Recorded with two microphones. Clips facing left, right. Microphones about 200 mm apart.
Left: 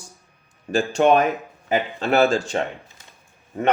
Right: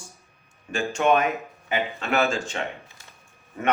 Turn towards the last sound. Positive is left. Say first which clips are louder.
# left 5 dB
turn(degrees=35)  # may be behind; listen again after turning